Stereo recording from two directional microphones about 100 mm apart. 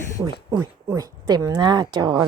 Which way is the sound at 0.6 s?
30° right (ahead or behind).